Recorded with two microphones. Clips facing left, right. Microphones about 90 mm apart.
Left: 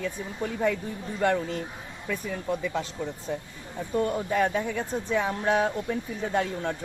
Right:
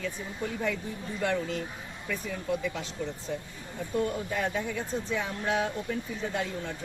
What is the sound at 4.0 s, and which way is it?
Speech, 50° left (ahead or behind).